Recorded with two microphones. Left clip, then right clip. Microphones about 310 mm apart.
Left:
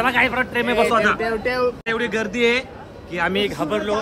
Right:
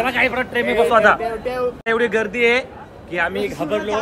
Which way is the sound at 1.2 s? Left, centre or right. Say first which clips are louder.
Left 1 dB; left.